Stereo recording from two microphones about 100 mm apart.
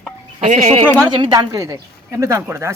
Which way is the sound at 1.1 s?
45° right (ahead or behind).